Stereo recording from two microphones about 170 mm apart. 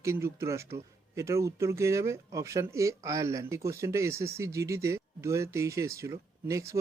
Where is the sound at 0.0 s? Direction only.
15° right (ahead or behind).